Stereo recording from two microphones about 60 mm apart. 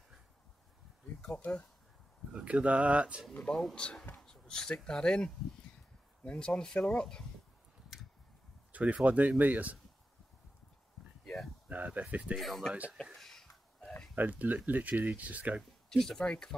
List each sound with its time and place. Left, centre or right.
1.4 s speech: left
2.3 s speech: right
3.7 s speech: centre
8.7 s speech: right
11.2 s a sound: centre
11.7 s speech: right
12.4 s speech: centre
12.9 s a sound: centre
14.1 s speech: right
15.9 s speech: centre